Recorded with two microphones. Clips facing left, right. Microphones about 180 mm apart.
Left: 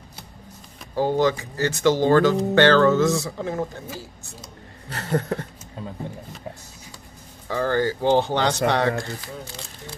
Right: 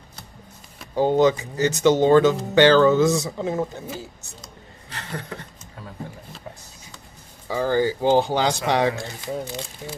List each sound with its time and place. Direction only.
0.9 s speech: 20° right (ahead or behind)
4.9 s a sound: 45° left (ahead or behind)
7.4 s speech: 10° right (ahead or behind)